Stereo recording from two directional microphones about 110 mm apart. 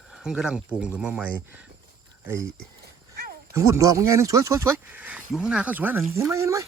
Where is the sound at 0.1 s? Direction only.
5° right (ahead or behind).